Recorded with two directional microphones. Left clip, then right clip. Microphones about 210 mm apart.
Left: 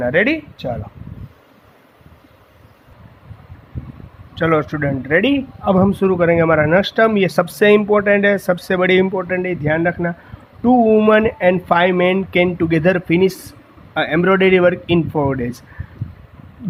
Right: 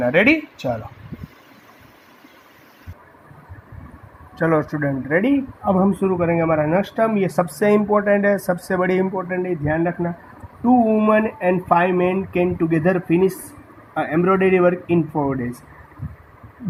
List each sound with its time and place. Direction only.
0.0 s speech: 10° left (ahead or behind)
4.4 s speech: 15° left (ahead or behind)
5.7 s speech: 45° left (ahead or behind); by 9.0 s 25° left (ahead or behind)
9.0 s speech: 40° left (ahead or behind)
15.1 s speech: 45° left (ahead or behind)